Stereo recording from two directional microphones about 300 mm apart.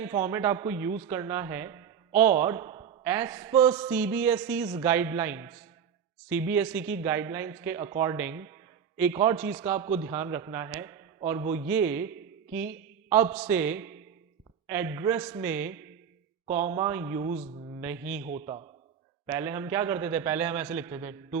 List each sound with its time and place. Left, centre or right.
0.0 s a man's voice: centre
17.7 s speech: centre
18.3 s a man's voice: right
19.2 s speech: centre